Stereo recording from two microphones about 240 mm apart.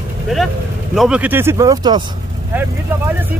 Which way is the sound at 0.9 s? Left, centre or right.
Centre.